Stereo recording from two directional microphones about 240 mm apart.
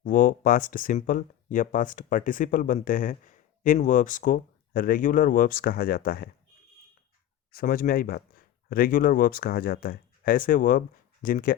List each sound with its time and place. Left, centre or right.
0.0 s speech: left
7.5 s speech: left